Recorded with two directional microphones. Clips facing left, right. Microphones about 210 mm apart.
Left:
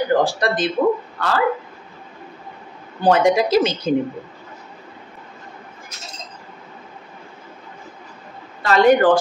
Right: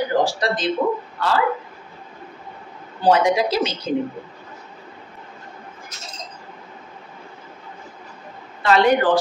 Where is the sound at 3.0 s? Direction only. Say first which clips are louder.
Left 2 dB; 50° left (ahead or behind).